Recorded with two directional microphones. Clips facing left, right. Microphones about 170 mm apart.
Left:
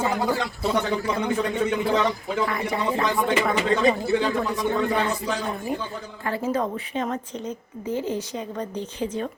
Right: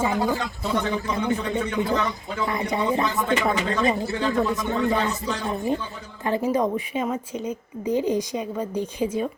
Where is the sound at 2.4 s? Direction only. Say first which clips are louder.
Right 2 dB; 20° right (ahead or behind).